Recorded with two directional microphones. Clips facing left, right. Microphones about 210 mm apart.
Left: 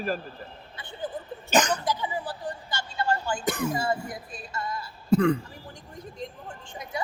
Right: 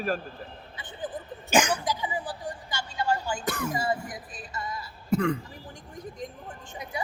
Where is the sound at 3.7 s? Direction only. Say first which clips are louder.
Left 1 dB; 15° right (ahead or behind).